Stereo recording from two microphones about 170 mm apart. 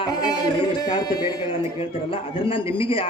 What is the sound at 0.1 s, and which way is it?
A man's voice, 25° left (ahead or behind).